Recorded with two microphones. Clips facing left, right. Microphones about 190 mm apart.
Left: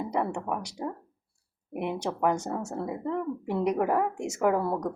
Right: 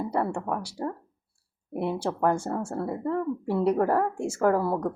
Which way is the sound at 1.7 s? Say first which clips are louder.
Right 3 dB; 15° left (ahead or behind).